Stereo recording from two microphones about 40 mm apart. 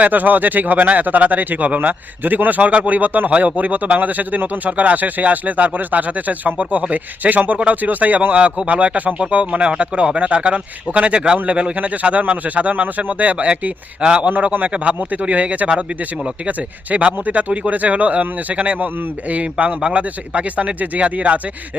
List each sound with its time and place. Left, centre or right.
0.0 s a man's voice: right
14.0 s a man's voice: right
14.3 s a man's voice: right